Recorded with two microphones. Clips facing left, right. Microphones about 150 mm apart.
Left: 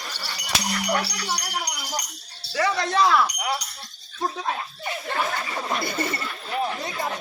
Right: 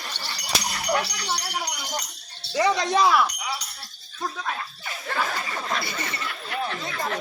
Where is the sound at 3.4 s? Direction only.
65° left (ahead or behind).